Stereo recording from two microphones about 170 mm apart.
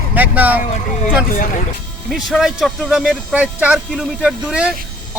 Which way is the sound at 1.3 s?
55° left (ahead or behind).